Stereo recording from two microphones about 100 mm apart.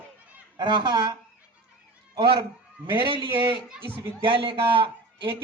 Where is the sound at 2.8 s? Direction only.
60° right (ahead or behind).